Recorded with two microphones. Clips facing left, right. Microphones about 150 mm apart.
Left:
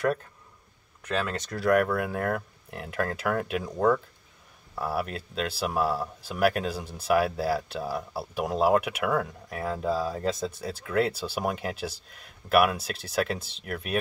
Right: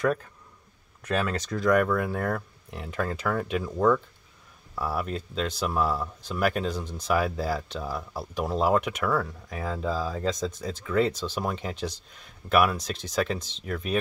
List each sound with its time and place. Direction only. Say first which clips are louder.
1.3 s speech: even; 5° left (ahead or behind)
4.7 s speech: even; 5° left (ahead or behind)